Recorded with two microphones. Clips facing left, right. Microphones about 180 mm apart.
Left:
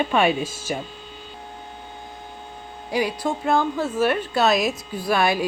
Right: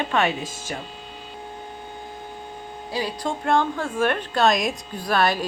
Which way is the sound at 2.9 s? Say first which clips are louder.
Left 4 dB; 15° left (ahead or behind).